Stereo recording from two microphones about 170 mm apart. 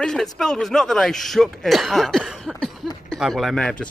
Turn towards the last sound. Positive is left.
turn(degrees=5)  # may be behind; listen again after turning